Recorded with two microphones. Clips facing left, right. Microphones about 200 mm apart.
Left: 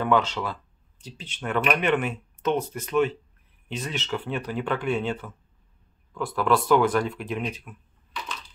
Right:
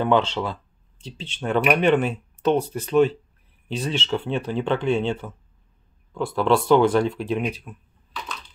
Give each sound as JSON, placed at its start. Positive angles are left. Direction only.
{"t": 0.0, "sound": "speech", "side_deg": -30}